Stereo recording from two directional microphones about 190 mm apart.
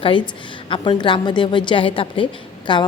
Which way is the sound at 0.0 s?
25° left (ahead or behind).